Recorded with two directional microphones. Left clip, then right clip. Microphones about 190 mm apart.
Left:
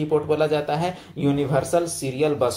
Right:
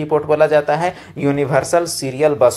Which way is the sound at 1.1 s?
50° right (ahead or behind).